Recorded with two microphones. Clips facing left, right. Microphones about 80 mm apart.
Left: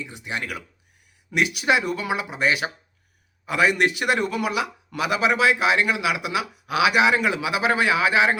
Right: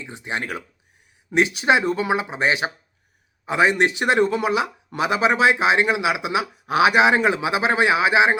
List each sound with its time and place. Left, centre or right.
0.0 s speech: right